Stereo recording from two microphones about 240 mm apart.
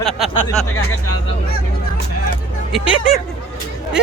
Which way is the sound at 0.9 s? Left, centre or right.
Left.